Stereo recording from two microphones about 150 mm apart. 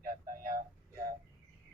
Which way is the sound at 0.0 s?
65° right (ahead or behind).